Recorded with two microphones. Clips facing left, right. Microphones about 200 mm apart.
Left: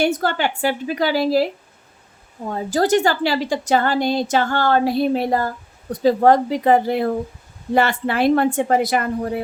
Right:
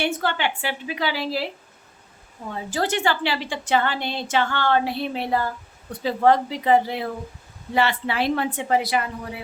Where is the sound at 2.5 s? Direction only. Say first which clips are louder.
Left 8 dB; 40° left (ahead or behind).